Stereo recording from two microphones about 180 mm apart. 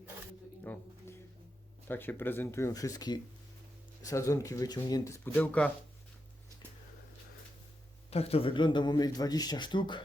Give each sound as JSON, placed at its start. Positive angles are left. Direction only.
{"t": 0.6, "sound": "a sound", "side_deg": 10}
{"t": 1.9, "sound": "speech", "side_deg": 10}
{"t": 8.1, "sound": "a man's voice", "side_deg": 35}